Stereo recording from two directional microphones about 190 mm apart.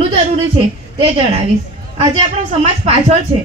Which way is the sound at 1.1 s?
35° right (ahead or behind).